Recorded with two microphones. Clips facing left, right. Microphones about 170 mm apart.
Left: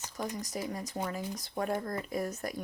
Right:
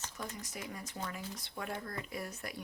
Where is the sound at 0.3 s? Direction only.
40° left (ahead or behind).